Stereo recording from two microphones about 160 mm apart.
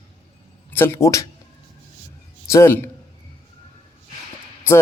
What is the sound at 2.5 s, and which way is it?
Speech, 15° left (ahead or behind).